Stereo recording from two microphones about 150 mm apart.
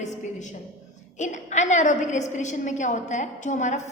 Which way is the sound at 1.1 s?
55° left (ahead or behind).